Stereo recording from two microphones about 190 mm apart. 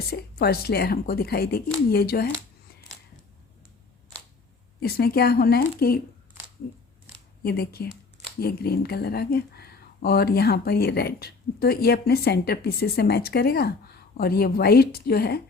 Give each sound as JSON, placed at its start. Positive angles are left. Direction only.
{"t": 0.1, "sound": "speech", "side_deg": 55}
{"t": 4.8, "sound": "speech", "side_deg": 55}
{"t": 7.4, "sound": "speech", "side_deg": 55}